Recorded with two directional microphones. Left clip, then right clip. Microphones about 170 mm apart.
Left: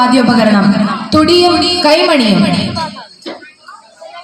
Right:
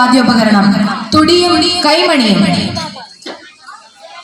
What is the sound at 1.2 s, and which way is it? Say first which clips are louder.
A woman's voice: left 1 dB; 50° left (ahead or behind).